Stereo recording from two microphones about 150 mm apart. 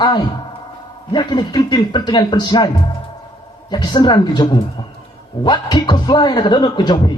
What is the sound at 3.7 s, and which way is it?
A man's voice, 25° left (ahead or behind).